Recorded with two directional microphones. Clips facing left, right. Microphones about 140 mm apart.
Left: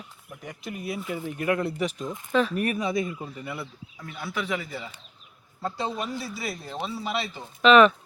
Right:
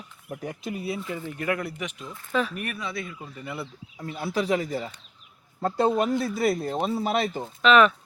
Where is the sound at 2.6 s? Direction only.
45° left (ahead or behind).